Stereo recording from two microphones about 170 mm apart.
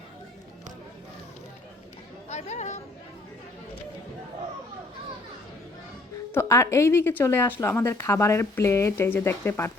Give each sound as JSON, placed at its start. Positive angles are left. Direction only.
{"t": 2.3, "sound": "speech", "side_deg": 40}
{"t": 6.3, "sound": "speech", "side_deg": 15}